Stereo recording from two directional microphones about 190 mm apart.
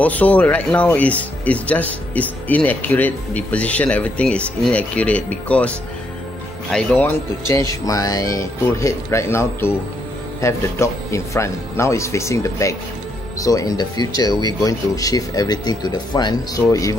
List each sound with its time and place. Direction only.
0.0 s speech: 10° left (ahead or behind)
6.7 s speech: 5° left (ahead or behind)